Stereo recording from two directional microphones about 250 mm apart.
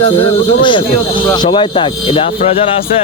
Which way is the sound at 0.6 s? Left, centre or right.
Centre.